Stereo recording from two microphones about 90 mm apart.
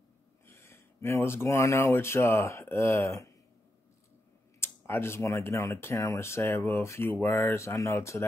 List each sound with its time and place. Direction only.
0.5 s speech: 30° left (ahead or behind)
4.6 s speech: 25° left (ahead or behind)